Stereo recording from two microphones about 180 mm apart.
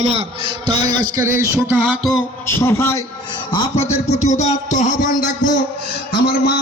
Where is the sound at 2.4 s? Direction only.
15° left (ahead or behind).